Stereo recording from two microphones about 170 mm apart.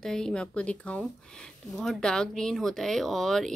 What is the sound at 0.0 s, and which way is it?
A woman's voice, 5° left (ahead or behind).